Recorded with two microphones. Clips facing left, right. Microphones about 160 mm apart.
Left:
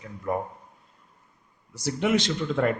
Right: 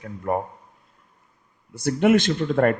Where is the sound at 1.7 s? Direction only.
55° right (ahead or behind).